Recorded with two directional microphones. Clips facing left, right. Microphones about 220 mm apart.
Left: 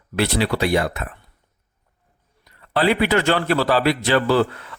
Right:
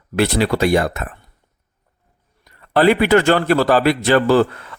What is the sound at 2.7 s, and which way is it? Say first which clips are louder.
Speech: right 5 dB; 50° right (ahead or behind).